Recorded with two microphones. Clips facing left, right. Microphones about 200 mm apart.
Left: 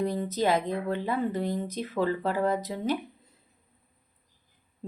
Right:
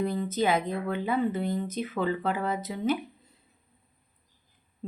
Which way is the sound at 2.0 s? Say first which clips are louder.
Left 2 dB; 35° left (ahead or behind).